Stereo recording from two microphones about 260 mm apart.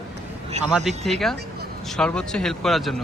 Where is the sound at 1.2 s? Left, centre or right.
Centre.